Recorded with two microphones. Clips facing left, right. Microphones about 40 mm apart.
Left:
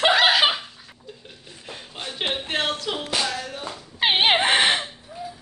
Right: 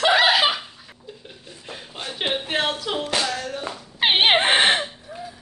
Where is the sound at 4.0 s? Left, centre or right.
Centre.